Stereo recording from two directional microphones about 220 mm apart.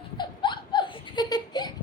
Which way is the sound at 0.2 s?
20° left (ahead or behind).